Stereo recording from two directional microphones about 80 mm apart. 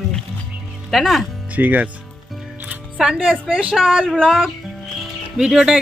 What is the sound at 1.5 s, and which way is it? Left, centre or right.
Speech, centre.